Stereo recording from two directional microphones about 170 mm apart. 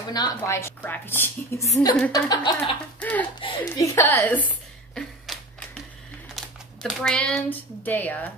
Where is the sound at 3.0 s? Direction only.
10° left (ahead or behind).